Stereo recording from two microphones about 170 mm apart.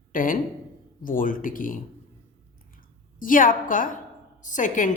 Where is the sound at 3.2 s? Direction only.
55° left (ahead or behind).